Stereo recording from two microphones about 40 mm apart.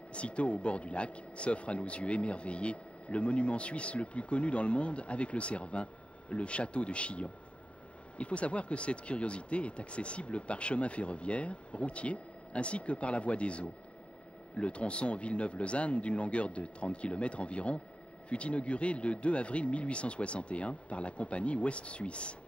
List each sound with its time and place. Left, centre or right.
0.1 s speech: left